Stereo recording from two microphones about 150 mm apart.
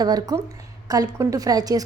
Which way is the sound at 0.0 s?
25° right (ahead or behind).